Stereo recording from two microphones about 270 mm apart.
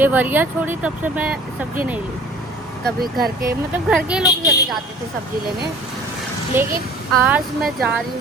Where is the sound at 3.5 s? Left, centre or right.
Centre.